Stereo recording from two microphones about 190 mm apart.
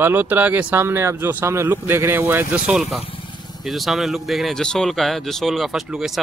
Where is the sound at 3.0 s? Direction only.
25° left (ahead or behind).